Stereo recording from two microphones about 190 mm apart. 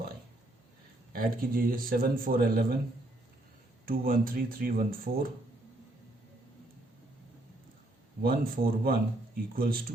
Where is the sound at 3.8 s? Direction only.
50° right (ahead or behind).